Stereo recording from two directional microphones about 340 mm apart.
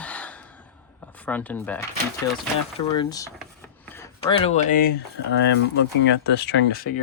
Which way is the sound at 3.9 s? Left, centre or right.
Centre.